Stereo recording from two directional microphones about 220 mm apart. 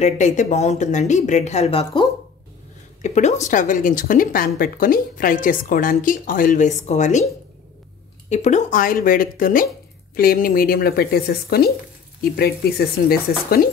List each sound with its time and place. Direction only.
0.0 s speech: 30° left (ahead or behind)
8.3 s speech: 30° left (ahead or behind)